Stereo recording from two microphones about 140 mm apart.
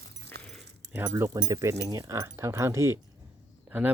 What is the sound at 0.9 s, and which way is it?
Speech, 20° right (ahead or behind).